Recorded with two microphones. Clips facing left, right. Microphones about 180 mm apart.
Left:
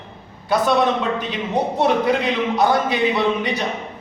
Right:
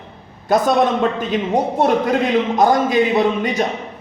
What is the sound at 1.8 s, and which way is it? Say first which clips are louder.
A man's voice: right 1 dB; 50° right (ahead or behind).